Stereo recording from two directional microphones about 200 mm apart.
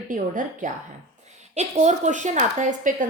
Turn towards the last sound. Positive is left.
turn(degrees=-40)  # may be behind; listen again after turning